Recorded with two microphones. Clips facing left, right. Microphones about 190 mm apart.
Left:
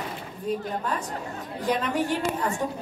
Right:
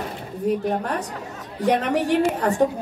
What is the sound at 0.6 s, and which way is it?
A woman's voice, 70° right (ahead or behind).